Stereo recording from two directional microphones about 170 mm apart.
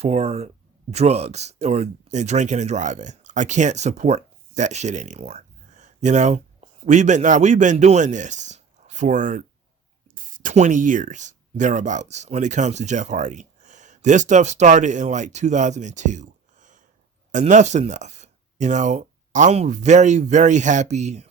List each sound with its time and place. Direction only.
0.0 s speech: 40° right (ahead or behind)